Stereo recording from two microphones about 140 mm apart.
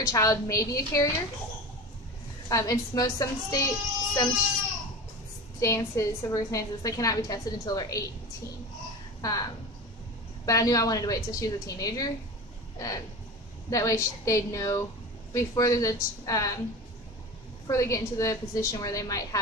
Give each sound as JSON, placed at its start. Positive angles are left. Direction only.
{"t": 0.0, "sound": "a woman's voice", "side_deg": 25}
{"t": 2.5, "sound": "a woman's voice", "side_deg": 25}
{"t": 5.6, "sound": "a woman's voice", "side_deg": 20}
{"t": 9.2, "sound": "a woman's voice", "side_deg": 25}
{"t": 12.7, "sound": "a sound", "side_deg": 25}
{"t": 13.7, "sound": "a woman's voice", "side_deg": 25}
{"t": 17.6, "sound": "a woman's voice", "side_deg": 20}